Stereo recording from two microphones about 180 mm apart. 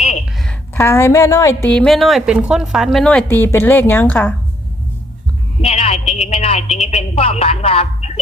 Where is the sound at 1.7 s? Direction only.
5° left (ahead or behind).